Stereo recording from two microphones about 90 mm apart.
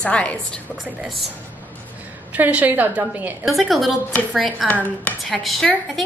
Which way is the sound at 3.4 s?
Centre (ahead or behind).